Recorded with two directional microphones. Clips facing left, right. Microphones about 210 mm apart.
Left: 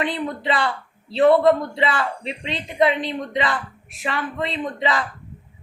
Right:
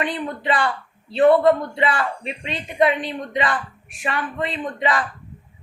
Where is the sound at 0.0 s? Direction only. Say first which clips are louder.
Left 1 dB; 25° left (ahead or behind).